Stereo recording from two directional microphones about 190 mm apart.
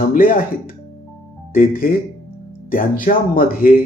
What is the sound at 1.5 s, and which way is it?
Speech, 50° left (ahead or behind).